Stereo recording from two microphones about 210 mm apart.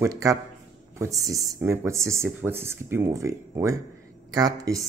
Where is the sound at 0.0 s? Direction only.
15° right (ahead or behind).